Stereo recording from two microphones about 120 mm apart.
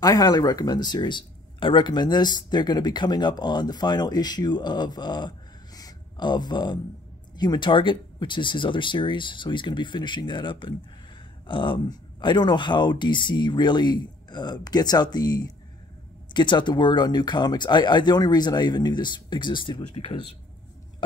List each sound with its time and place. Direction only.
0.0 s speech: 30° left (ahead or behind)
5.8 s a sound: 35° left (ahead or behind)
7.3 s speech: 35° left (ahead or behind)